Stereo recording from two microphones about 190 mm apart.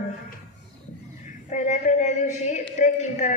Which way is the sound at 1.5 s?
40° left (ahead or behind).